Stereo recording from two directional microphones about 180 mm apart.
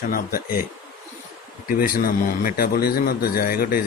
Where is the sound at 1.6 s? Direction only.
50° left (ahead or behind).